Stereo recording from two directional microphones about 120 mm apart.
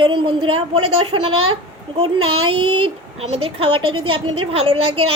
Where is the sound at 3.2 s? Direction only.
55° right (ahead or behind).